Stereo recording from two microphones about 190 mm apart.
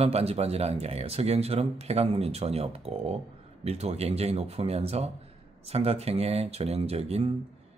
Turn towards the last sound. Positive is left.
turn(degrees=-30)  # may be behind; listen again after turning